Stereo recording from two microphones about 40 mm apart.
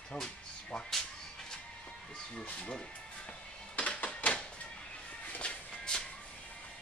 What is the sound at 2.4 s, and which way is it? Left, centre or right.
Speech, left.